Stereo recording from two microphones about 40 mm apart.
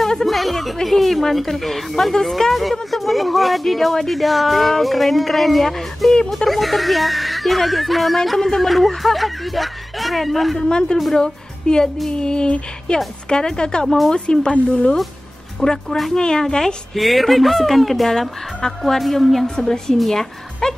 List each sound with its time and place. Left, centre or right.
0.0 s speech: centre
10.7 s a woman's voice: centre
13.8 s speech: centre
14.1 s a woman's voice: left
16.9 s speech: centre
19.4 s a woman's voice: centre